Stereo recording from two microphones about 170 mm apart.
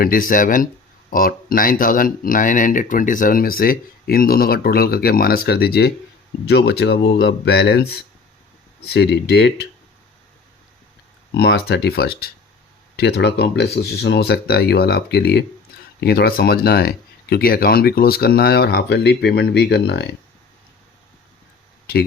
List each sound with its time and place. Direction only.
0.0 s speech: 55° left (ahead or behind); by 9.6 s 75° left (ahead or behind)
11.3 s speech: 80° left
13.0 s speech: 80° left